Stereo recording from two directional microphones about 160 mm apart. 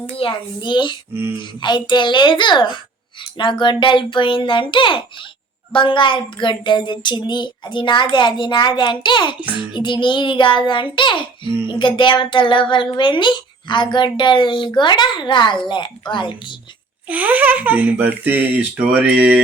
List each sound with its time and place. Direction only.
0.2 s a woman's voice: 30° left (ahead or behind)
1.1 s speech: 15° right (ahead or behind)
1.4 s a child's voice: 30° left (ahead or behind)
17.1 s speech: 10° right (ahead or behind)